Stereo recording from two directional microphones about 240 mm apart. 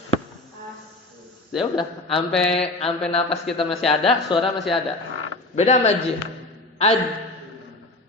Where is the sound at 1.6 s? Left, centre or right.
Centre.